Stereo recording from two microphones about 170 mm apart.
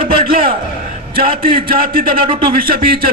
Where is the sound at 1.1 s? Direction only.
60° right (ahead or behind).